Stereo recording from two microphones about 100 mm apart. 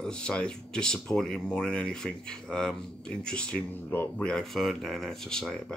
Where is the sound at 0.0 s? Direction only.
10° left (ahead or behind).